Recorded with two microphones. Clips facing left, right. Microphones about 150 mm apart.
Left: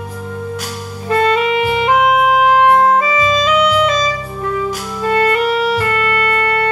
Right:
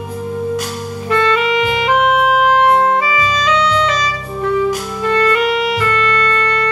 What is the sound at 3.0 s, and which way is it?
Clarinet, 25° left (ahead or behind).